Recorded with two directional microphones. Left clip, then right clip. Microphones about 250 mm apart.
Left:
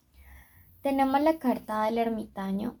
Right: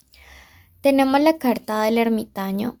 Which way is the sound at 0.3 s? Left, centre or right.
Right.